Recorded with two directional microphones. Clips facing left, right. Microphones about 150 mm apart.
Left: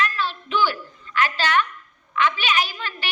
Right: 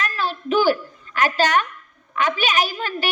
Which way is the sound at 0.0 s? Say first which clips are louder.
Even; 45° right (ahead or behind).